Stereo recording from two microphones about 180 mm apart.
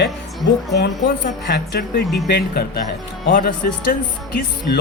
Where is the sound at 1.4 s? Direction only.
70° left (ahead or behind); by 3.7 s 50° left (ahead or behind).